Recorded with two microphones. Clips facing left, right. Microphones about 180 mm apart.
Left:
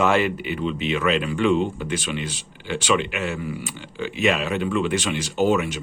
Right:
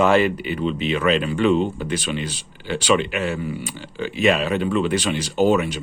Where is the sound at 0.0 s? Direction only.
40° right (ahead or behind).